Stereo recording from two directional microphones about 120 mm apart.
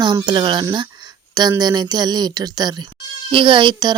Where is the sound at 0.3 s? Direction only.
40° right (ahead or behind).